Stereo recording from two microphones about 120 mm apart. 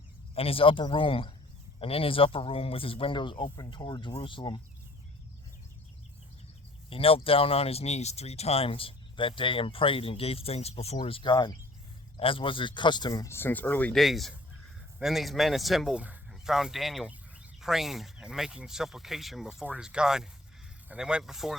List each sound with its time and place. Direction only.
0.3 s speech: 50° left (ahead or behind)
6.9 s speech: 50° left (ahead or behind)
11.0 s speech: 45° left (ahead or behind)
13.2 s speech: 20° left (ahead or behind)
13.9 s speech: centre (ahead or behind)